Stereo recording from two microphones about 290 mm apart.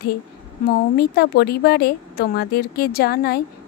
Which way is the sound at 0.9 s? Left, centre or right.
Left.